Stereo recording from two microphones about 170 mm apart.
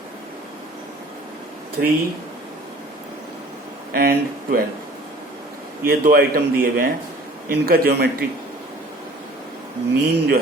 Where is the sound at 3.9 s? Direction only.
65° right (ahead or behind).